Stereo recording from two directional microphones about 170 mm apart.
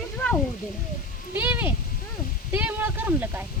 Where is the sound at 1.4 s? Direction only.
10° right (ahead or behind).